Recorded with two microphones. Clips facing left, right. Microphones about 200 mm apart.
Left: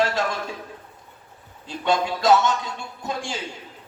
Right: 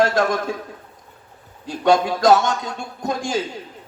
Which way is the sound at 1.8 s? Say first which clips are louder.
Right 5 dB; 45° right (ahead or behind).